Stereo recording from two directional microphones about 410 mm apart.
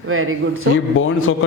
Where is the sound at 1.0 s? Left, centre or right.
Left.